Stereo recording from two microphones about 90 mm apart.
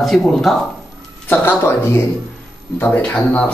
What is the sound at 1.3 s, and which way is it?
Speech, 25° left (ahead or behind).